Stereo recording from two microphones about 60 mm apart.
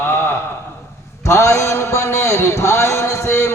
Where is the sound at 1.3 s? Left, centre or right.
Left.